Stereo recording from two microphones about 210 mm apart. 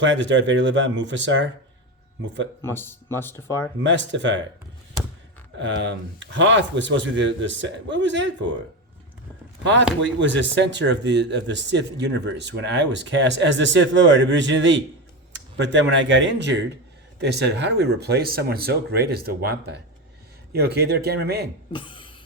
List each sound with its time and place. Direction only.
0.0 s speech: 60° right (ahead or behind)
2.6 s speech: 10° left (ahead or behind)
3.8 s speech: 60° right (ahead or behind)
5.5 s speech: 60° right (ahead or behind)
9.6 s speech: 60° right (ahead or behind)
21.7 s a woman's voice: 25° left (ahead or behind)